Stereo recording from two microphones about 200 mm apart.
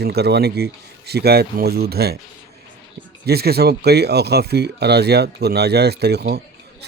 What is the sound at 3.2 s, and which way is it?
Speech, 50° right (ahead or behind).